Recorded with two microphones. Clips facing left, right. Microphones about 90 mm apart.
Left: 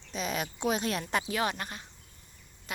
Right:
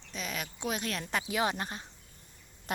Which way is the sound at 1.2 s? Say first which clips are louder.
Even; 15° right (ahead or behind).